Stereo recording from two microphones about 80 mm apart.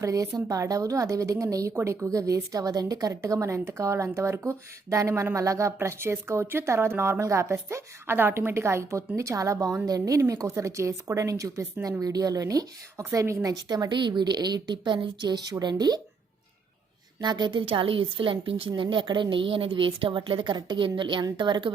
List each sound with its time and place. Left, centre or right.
0.0 s a woman's voice: right
17.2 s a woman's voice: right